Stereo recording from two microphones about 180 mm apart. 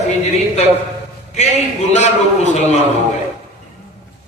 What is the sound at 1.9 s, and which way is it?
Speech, 40° left (ahead or behind).